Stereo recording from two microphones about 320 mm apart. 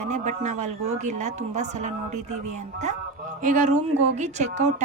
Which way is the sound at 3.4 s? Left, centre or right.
Right.